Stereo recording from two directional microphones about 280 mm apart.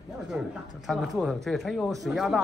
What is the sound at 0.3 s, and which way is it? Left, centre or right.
A man's voice, centre.